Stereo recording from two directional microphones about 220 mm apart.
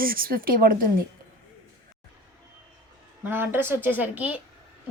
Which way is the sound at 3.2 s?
10° right (ahead or behind).